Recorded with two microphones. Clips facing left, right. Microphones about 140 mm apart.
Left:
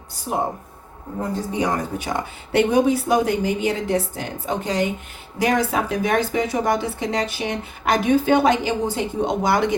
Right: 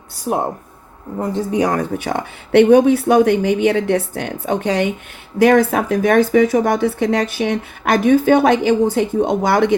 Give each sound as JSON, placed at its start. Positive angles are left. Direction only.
{"t": 1.5, "sound": "speech", "side_deg": -60}
{"t": 5.4, "sound": "speech", "side_deg": -55}